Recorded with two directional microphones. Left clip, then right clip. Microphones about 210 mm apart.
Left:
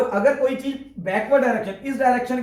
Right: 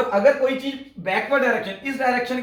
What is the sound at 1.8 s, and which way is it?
Speech, 20° right (ahead or behind).